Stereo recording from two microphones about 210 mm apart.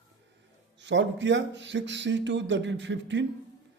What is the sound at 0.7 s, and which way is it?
Speech, 60° right (ahead or behind).